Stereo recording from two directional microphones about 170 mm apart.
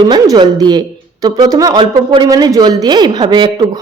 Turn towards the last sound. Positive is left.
turn(degrees=-25)  # may be behind; listen again after turning